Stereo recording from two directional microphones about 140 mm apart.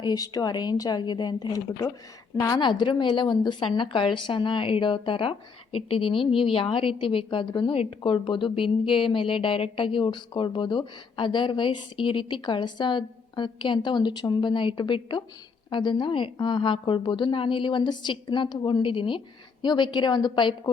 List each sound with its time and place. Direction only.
0.0 s speech: 30° left (ahead or behind)